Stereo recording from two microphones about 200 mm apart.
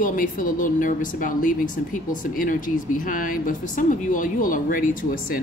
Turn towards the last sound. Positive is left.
turn(degrees=45)  # may be behind; listen again after turning